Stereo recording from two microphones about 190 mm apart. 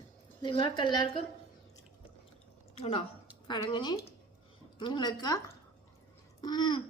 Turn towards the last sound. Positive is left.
turn(degrees=25)  # may be behind; listen again after turning